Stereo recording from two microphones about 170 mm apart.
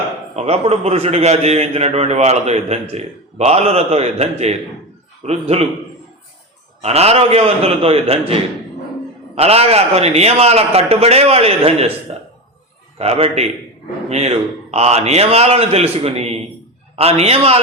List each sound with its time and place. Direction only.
0.3 s a man's voice: 35° right (ahead or behind)
6.8 s a man's voice: 40° right (ahead or behind)
13.0 s a man's voice: 35° right (ahead or behind)